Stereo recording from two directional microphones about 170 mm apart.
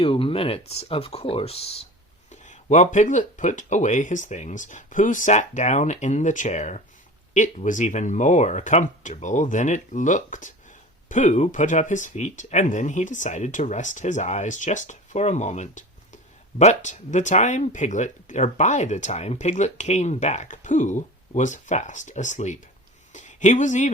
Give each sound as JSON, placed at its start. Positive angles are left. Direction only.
{"t": 0.0, "sound": "speech", "side_deg": 30}
{"t": 2.3, "sound": "speech", "side_deg": 45}
{"t": 23.1, "sound": "a sound", "side_deg": 45}